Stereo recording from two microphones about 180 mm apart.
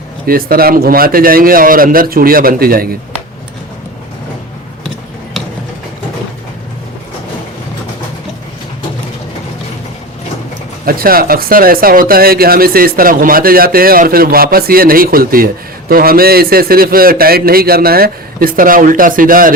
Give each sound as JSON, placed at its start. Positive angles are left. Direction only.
{"t": 0.3, "sound": "speech", "side_deg": -55}
{"t": 10.8, "sound": "speech", "side_deg": -55}